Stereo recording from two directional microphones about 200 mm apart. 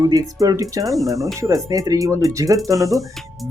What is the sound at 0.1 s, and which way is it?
Speech, 20° right (ahead or behind).